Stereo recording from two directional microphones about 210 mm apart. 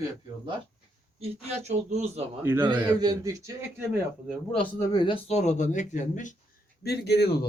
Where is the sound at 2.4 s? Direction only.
10° right (ahead or behind).